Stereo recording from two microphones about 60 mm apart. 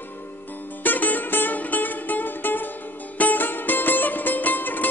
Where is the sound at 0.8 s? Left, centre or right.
Left.